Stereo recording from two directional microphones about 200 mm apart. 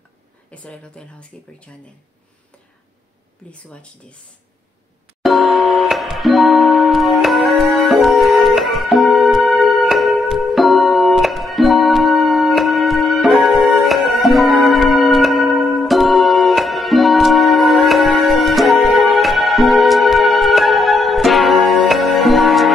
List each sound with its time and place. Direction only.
0.5 s a woman's voice: 5° left (ahead or behind)
3.5 s a woman's voice: 5° left (ahead or behind)
5.2 s music: centre (ahead or behind)